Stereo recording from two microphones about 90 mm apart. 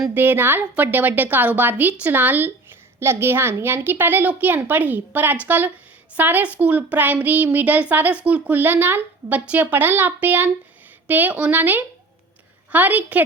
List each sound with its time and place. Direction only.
0.1 s a child's voice: 20° right (ahead or behind)